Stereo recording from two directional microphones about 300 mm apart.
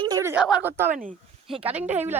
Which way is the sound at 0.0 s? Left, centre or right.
Centre.